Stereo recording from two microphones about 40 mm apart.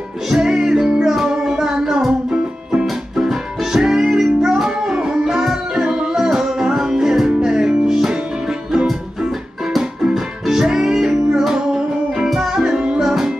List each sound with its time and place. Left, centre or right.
0.3 s music: centre
3.2 s music: centre
10.1 s music: centre
13.0 s music: centre